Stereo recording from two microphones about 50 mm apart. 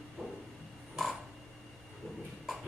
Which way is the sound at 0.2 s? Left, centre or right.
Centre.